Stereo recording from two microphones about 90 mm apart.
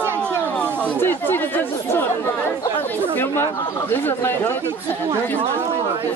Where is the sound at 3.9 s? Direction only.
25° left (ahead or behind).